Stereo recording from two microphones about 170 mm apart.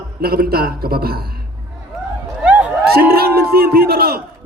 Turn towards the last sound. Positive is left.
turn(degrees=-65)  # may be behind; listen again after turning